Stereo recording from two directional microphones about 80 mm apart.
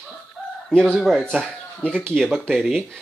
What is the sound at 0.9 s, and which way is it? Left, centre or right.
Speech, centre.